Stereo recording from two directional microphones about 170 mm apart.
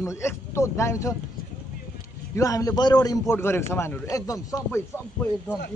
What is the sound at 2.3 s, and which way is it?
A man's voice, 20° left (ahead or behind).